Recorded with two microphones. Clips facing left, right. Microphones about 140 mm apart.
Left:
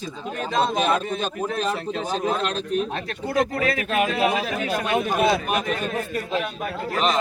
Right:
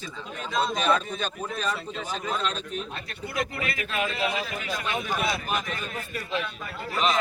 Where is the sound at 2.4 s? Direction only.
65° left (ahead or behind).